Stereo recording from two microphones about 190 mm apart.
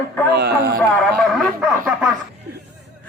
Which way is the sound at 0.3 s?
60° right (ahead or behind).